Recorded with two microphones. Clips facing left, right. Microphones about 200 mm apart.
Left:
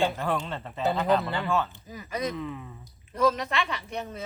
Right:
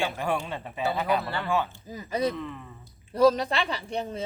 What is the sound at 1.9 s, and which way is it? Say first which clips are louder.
Speech: right 4 dB; 30° right (ahead or behind).